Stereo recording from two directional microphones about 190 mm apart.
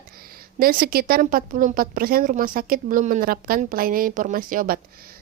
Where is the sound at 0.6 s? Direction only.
50° right (ahead or behind).